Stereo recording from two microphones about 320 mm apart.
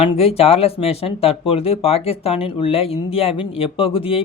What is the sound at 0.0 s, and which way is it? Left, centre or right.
Speech, centre.